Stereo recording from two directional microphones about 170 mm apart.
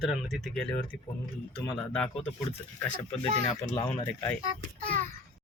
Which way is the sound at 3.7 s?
40° left (ahead or behind).